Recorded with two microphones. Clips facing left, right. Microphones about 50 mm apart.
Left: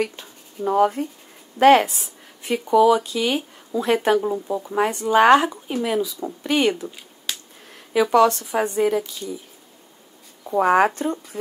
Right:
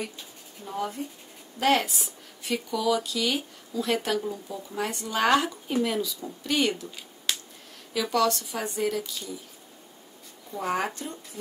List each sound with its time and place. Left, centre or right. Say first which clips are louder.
0.7 s speech: left 13 dB; left
1.6 s a woman's voice: left 10 dB; left; by 6.1 s centre
6.1 s speech: left 6 dB; left
7.9 s speech: left 9 dB; left
10.4 s speech: left 12 dB; left